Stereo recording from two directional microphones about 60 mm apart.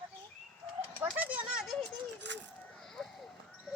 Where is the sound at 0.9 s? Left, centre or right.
Right.